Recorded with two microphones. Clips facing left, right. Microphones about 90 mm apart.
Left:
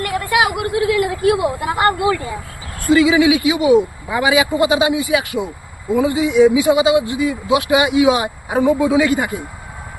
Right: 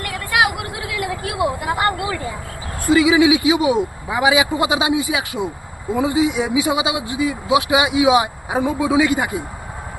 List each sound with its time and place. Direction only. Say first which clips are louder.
0.0 s vehicle: left 2 dB; centre (ahead or behind)
1.6 s speech: left 4 dB; centre (ahead or behind)
2.8 s speech: left 1 dB; 15° right (ahead or behind)